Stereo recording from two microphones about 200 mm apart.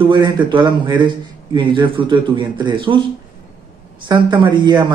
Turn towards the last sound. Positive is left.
turn(degrees=-20)  # may be behind; listen again after turning